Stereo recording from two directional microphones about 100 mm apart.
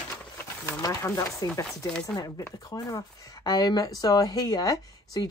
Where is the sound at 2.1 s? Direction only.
40° left (ahead or behind).